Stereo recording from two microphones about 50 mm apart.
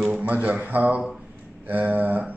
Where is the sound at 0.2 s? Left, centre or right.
Right.